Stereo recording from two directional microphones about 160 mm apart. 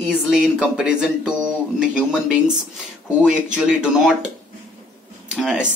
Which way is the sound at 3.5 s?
5° right (ahead or behind).